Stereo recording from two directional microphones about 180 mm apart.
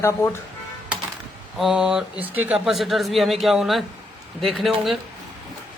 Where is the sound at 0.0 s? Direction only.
15° left (ahead or behind).